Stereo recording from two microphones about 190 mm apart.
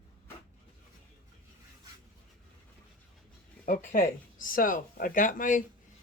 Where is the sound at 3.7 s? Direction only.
45° left (ahead or behind).